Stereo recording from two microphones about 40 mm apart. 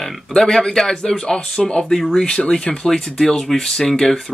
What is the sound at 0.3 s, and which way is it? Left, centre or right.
Speech, centre.